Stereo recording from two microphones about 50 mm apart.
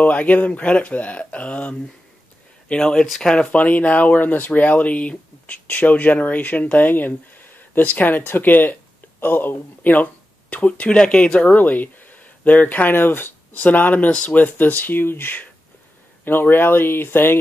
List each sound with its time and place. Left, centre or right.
0.0 s speech: left
2.7 s speech: centre
3.5 s speech: left
10.5 s speech: left